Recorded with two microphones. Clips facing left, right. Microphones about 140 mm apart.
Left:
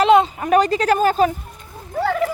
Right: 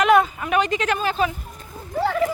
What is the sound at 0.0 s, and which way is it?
Sheep, 25° left (ahead or behind).